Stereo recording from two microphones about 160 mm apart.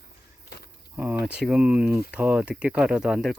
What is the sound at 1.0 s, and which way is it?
Speech, 10° right (ahead or behind).